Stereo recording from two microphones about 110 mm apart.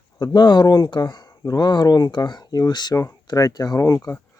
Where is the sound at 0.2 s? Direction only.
40° left (ahead or behind).